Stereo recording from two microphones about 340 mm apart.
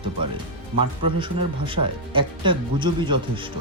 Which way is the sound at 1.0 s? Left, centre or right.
Centre.